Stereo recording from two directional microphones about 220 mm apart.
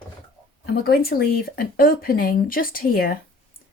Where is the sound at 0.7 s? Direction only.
45° left (ahead or behind).